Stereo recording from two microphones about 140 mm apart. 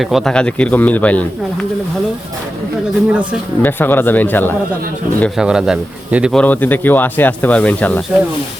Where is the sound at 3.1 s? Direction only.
10° right (ahead or behind).